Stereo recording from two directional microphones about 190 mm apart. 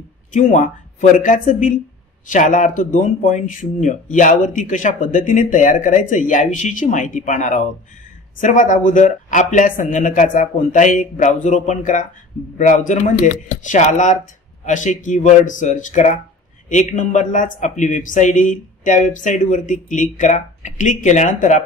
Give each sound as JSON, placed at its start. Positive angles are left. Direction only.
{"t": 0.3, "sound": "speech", "side_deg": 40}